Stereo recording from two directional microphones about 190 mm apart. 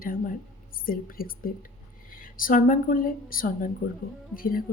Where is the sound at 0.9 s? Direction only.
50° left (ahead or behind).